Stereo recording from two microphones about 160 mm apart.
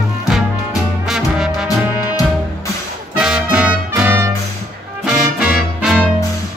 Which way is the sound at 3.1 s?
5° right (ahead or behind).